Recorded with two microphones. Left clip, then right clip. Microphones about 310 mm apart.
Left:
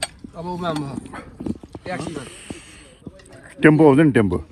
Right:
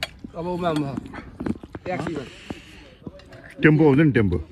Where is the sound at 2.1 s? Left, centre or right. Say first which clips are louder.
Right 1 dB; centre.